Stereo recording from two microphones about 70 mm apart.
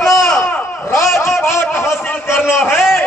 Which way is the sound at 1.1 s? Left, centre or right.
Left.